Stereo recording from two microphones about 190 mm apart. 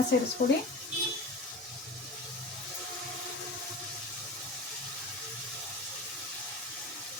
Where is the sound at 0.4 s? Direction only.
40° left (ahead or behind).